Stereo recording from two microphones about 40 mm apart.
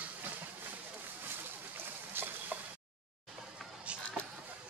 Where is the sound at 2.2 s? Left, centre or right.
Right.